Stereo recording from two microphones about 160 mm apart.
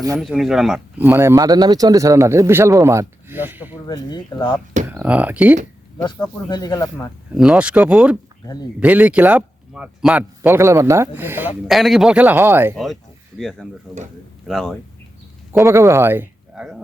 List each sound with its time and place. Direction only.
0.2 s speech: centre (ahead or behind)
1.0 s speech: 15° right (ahead or behind)
3.8 s speech: 25° left (ahead or behind)
4.9 s speech: 10° right (ahead or behind)
6.1 s speech: 25° left (ahead or behind)
7.3 s speech: 5° right (ahead or behind)
11.7 s speech: centre (ahead or behind)
12.7 s speech: centre (ahead or behind)
15.6 s speech: 15° right (ahead or behind)